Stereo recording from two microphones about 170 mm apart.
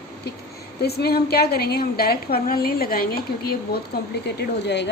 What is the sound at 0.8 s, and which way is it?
A woman's voice, 70° left (ahead or behind).